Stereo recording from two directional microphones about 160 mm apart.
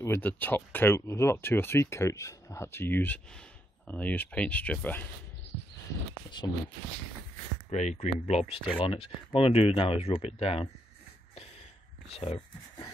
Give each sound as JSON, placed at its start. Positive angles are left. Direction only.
{"t": 0.0, "sound": "speech", "side_deg": 15}
{"t": 7.7, "sound": "speech", "side_deg": 45}
{"t": 12.1, "sound": "speech", "side_deg": 40}